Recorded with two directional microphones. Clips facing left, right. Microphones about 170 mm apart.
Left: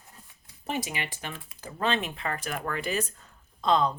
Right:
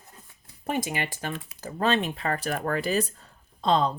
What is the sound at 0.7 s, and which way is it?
Speech, 50° right (ahead or behind).